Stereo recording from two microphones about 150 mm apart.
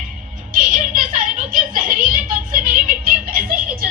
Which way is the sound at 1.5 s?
70° right (ahead or behind).